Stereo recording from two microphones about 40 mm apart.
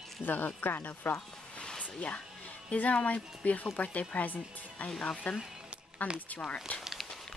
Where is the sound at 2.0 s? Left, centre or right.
Left.